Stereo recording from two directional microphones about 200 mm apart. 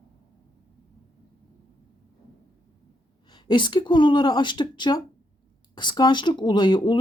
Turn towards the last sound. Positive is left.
turn(degrees=20)  # may be behind; listen again after turning